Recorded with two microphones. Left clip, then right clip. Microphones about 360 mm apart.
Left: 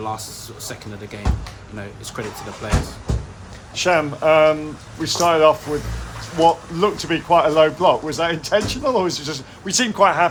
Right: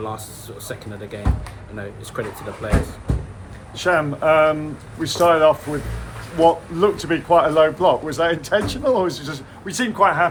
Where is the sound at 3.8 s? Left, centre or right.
Centre.